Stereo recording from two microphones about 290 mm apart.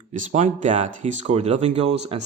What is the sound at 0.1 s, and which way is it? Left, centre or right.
A man's voice, right.